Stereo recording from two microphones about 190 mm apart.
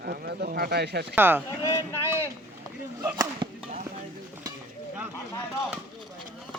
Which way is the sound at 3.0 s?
20° right (ahead or behind).